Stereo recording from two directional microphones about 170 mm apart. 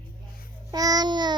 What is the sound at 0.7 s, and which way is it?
Speech, 20° right (ahead or behind).